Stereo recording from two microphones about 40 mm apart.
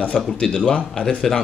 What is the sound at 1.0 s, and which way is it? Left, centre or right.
Speech, left.